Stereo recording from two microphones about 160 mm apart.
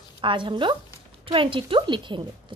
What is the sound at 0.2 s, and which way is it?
A woman's voice, 30° right (ahead or behind).